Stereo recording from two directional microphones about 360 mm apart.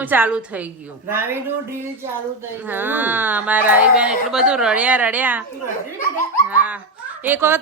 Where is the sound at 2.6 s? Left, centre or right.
Centre.